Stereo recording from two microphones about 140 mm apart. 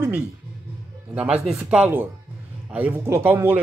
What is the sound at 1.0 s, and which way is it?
A man's voice, 10° right (ahead or behind).